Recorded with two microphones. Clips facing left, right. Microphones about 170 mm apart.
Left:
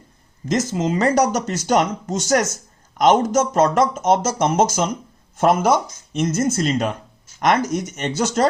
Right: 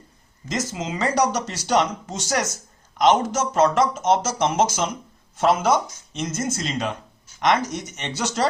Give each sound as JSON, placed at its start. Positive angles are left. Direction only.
{"t": 0.7, "sound": "speech", "side_deg": 50}